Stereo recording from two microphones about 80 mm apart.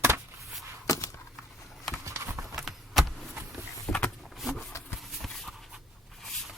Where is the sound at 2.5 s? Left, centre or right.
Centre.